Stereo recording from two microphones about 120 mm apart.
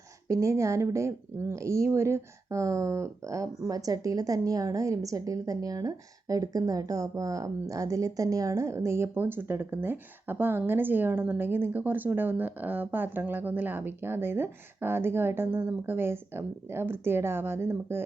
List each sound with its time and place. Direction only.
0.3 s speech: 25° right (ahead or behind)